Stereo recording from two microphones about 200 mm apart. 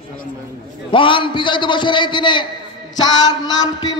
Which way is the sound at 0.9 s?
25° left (ahead or behind).